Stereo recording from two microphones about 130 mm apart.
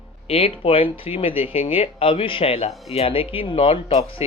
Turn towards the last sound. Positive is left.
turn(degrees=50)  # may be behind; listen again after turning